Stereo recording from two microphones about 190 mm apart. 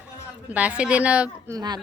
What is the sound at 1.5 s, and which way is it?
Speech, 20° right (ahead or behind).